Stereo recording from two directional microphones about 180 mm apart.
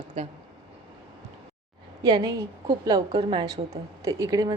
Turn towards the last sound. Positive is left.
turn(degrees=-20)  # may be behind; listen again after turning